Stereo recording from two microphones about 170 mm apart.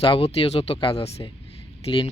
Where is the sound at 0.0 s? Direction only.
35° left (ahead or behind).